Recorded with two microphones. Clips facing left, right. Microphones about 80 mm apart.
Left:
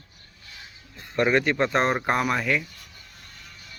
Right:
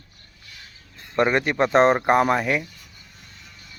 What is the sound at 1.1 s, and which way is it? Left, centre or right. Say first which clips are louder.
Speech: right 1 dB; centre.